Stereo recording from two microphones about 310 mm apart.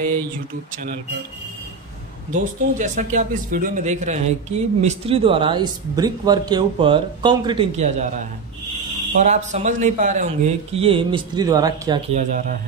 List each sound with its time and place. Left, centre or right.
2.3 s speech: right
9.2 s speech: right